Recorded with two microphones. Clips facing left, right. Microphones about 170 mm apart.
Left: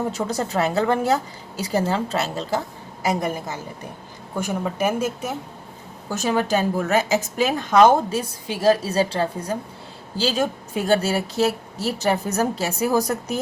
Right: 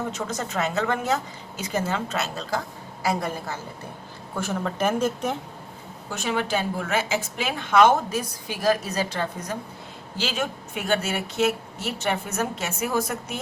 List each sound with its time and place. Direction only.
0.1 s a woman's voice: 35° left (ahead or behind); by 5.4 s 5° left (ahead or behind)
6.1 s a woman's voice: 40° left (ahead or behind)